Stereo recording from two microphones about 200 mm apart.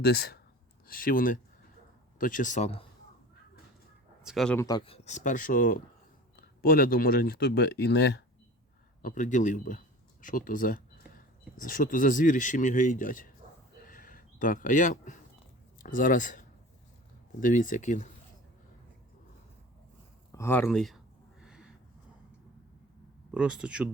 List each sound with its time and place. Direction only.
0.0 s speech: 50° left (ahead or behind); by 2.8 s 35° left (ahead or behind)
4.2 s speech: centre (ahead or behind)
4.5 s speech: 15° left (ahead or behind)
4.9 s speech: 35° left (ahead or behind); by 8.2 s 55° left (ahead or behind)
9.0 s speech: 40° left (ahead or behind)
13.7 s a sound: 45° left (ahead or behind)
15.8 s speech: 45° left (ahead or behind)
20.3 s speech: 10° left (ahead or behind)
21.4 s a sound: 5° right (ahead or behind)
23.3 s speech: 5° right (ahead or behind)